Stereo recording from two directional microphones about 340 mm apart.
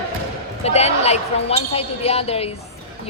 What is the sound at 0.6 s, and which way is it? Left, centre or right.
A woman's voice, centre.